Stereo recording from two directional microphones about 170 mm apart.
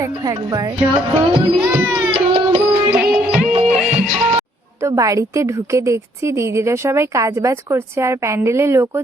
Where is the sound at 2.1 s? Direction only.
35° right (ahead or behind).